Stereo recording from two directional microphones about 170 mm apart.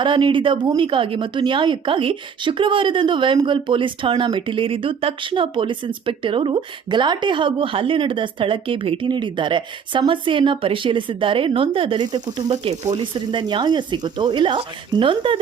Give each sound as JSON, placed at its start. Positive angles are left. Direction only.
{"t": 0.0, "sound": "a woman's voice", "side_deg": -30}